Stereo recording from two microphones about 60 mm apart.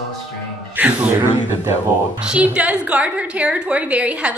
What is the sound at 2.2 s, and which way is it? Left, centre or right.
A woman's voice, centre.